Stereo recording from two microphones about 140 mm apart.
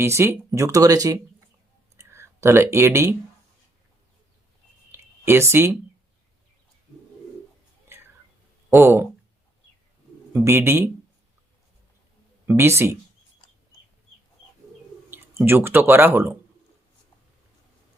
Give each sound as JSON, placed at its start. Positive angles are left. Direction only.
{"t": 0.0, "sound": "speech", "side_deg": -20}
{"t": 4.9, "sound": "a sound", "side_deg": -15}
{"t": 8.7, "sound": "a man's voice", "side_deg": -15}
{"t": 10.3, "sound": "a man's voice", "side_deg": -15}
{"t": 12.5, "sound": "a man's voice", "side_deg": -15}
{"t": 15.1, "sound": "speech", "side_deg": -15}